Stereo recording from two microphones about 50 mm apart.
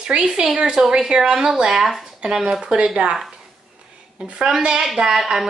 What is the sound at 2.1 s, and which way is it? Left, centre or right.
A woman's voice, centre.